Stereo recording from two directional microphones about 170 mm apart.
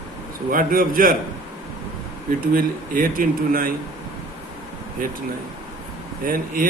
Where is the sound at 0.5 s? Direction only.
55° right (ahead or behind).